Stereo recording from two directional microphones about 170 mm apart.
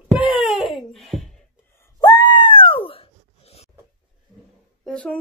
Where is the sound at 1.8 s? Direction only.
25° left (ahead or behind).